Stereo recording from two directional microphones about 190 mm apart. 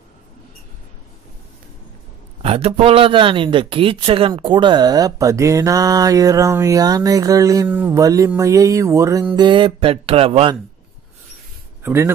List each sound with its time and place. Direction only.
2.4 s speech: 30° right (ahead or behind)
7.6 s mantra: 10° right (ahead or behind)
8.4 s speech: 15° right (ahead or behind)
11.8 s speech: 15° right (ahead or behind)